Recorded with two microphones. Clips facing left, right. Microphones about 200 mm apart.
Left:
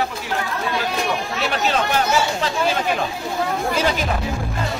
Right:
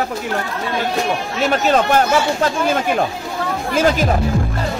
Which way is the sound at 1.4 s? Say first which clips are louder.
Right 7 dB; 45° right (ahead or behind).